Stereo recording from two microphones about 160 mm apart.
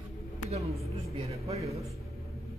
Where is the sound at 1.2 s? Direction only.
40° right (ahead or behind).